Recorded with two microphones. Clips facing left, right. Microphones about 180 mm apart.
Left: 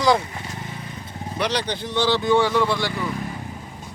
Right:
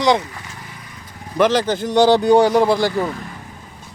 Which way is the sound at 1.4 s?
45° right (ahead or behind).